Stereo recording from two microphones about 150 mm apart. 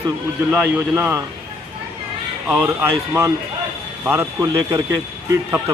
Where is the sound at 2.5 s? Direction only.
15° right (ahead or behind).